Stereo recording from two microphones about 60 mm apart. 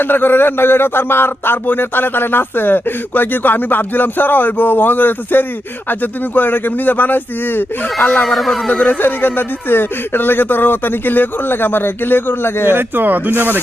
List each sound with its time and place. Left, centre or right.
0.0 s a man's voice: left
8.2 s speech: centre
8.7 s a man's voice: left
12.6 s speech: right